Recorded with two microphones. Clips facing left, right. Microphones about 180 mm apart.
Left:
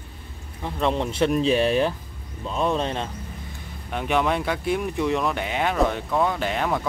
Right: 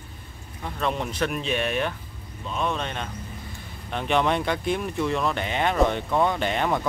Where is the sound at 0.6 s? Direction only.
25° left (ahead or behind).